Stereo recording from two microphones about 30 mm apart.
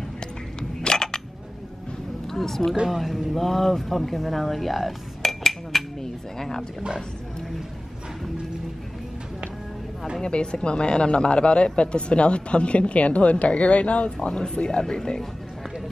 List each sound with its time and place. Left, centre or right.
0.6 s a sound: left
2.2 s a woman's voice: centre
2.9 s speech: centre
3.4 s dishes: centre
6.3 s roaring cats: centre
10.2 s speech: left
14.8 s speech: centre